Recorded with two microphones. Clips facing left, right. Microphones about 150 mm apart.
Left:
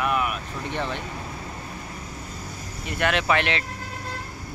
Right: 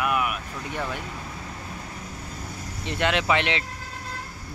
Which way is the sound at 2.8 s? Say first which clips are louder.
Even; 20° right (ahead or behind).